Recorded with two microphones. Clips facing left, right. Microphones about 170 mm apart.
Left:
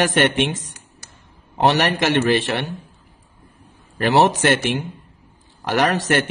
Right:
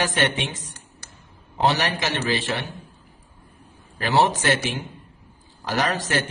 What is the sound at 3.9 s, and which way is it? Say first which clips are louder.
A man's voice: left 4 dB; 65° left (ahead or behind).